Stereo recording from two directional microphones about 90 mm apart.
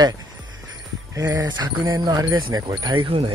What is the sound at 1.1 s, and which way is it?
Speech, 45° right (ahead or behind).